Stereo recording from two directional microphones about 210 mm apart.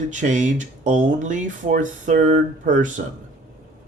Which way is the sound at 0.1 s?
35° right (ahead or behind).